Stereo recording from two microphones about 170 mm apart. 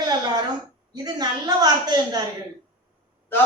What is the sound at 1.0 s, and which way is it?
Speech, 25° right (ahead or behind).